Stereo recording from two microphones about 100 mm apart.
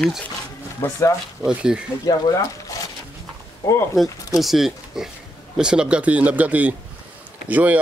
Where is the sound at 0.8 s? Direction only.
30° left (ahead or behind).